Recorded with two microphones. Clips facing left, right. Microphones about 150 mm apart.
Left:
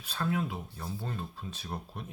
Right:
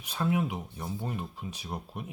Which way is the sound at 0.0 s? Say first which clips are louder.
Right 3 dB; 15° right (ahead or behind).